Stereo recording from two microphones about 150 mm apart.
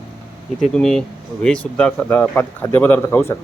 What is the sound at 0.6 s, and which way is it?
Speech, 5° left (ahead or behind).